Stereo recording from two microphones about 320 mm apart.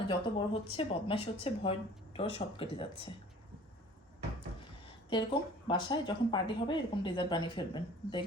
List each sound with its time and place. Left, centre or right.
0.1 s a woman's voice: centre
5.0 s a woman's voice: centre